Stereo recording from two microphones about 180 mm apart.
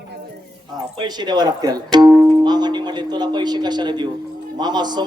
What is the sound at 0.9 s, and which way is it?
Speech, 25° right (ahead or behind).